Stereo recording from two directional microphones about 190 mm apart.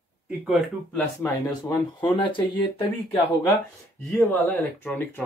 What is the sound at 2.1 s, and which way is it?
Speech, 25° left (ahead or behind).